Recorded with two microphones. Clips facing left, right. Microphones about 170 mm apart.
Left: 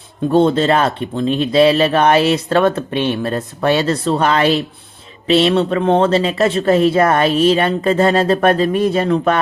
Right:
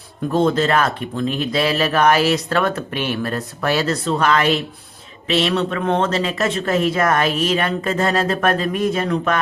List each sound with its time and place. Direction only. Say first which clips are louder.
0.3 s speech: left 4 dB; 30° left (ahead or behind)